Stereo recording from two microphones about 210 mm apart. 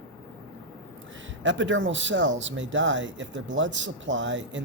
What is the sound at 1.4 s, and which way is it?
Speech, 60° right (ahead or behind).